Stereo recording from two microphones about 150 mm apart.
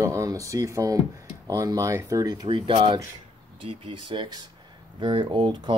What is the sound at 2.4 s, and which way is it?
Speech, 35° right (ahead or behind).